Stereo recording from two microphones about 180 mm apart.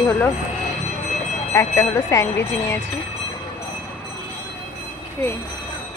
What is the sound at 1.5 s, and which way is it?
A woman's voice, 15° left (ahead or behind).